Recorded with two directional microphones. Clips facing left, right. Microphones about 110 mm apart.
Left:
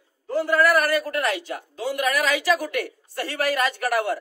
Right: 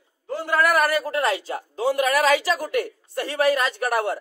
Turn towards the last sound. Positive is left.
turn(degrees=-25)  # may be behind; listen again after turning